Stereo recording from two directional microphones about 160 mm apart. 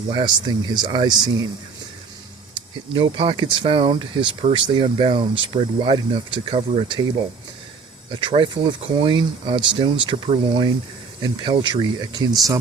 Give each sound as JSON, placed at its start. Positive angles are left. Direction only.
{"t": 0.1, "sound": "speech", "side_deg": -30}
{"t": 2.9, "sound": "speech", "side_deg": -35}
{"t": 8.1, "sound": "speech", "side_deg": -30}